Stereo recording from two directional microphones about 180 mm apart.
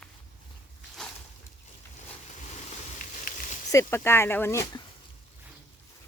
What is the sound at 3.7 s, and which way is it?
Speech, 15° left (ahead or behind).